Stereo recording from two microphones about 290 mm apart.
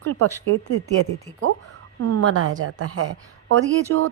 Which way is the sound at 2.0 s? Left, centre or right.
Right.